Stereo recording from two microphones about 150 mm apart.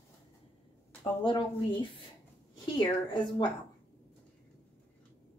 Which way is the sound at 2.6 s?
30° left (ahead or behind).